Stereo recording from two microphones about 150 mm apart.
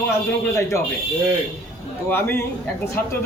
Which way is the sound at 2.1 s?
15° left (ahead or behind).